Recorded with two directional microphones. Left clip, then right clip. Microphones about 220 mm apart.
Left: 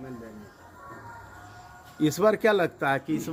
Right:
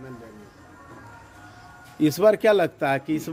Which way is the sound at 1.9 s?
25° right (ahead or behind).